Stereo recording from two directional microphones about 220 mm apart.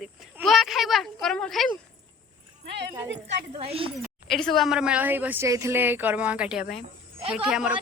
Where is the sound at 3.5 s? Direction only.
25° right (ahead or behind).